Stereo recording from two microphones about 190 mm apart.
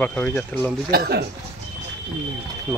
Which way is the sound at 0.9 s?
55° right (ahead or behind).